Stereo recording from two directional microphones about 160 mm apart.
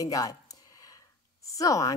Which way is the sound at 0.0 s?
20° left (ahead or behind).